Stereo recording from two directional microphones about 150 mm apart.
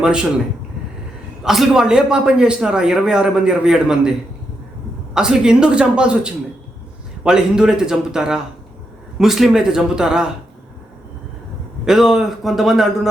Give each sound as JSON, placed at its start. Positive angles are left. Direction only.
{"t": 0.0, "sound": "a man's voice", "side_deg": -5}
{"t": 1.5, "sound": "a man's voice", "side_deg": -5}
{"t": 5.1, "sound": "a man's voice", "side_deg": -5}
{"t": 11.9, "sound": "a man's voice", "side_deg": 0}